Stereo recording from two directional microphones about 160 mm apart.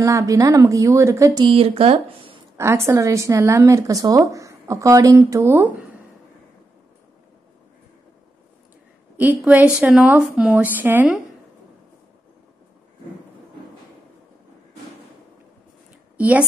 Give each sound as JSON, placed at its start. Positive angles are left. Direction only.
{"t": 0.0, "sound": "a woman's voice", "side_deg": -20}
{"t": 1.4, "sound": "speech", "side_deg": -35}
{"t": 2.5, "sound": "a woman's voice", "side_deg": -15}
{"t": 9.1, "sound": "a woman's voice", "side_deg": -10}
{"t": 16.2, "sound": "a woman's voice", "side_deg": -10}